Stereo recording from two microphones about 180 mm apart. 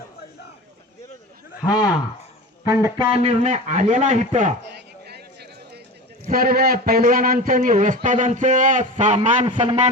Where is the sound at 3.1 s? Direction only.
35° right (ahead or behind).